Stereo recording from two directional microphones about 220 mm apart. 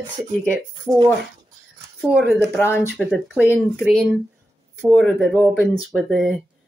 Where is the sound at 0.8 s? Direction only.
15° right (ahead or behind).